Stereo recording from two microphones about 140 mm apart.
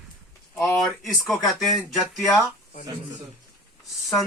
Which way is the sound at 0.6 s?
Centre (ahead or behind).